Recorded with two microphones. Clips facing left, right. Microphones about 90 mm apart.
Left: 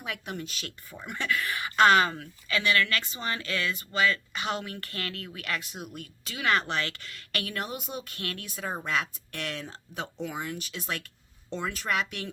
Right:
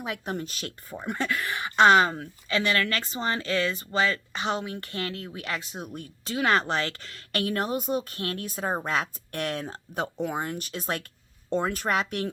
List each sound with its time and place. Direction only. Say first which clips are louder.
0.0 s speech: right 4 dB; 30° right (ahead or behind)